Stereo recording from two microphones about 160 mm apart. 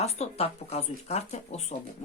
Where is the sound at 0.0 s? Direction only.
40° left (ahead or behind).